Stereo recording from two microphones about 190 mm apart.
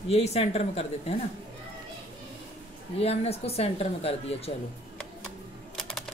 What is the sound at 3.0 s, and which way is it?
Speech, 30° left (ahead or behind).